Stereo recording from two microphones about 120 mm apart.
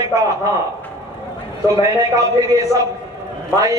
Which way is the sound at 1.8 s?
30° right (ahead or behind).